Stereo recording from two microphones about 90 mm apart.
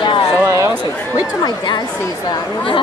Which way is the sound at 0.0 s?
65° left (ahead or behind).